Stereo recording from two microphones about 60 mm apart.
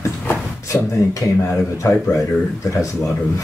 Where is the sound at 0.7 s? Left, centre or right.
Left.